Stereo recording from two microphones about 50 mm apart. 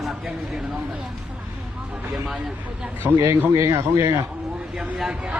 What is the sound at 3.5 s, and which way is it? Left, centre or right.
Speech, right.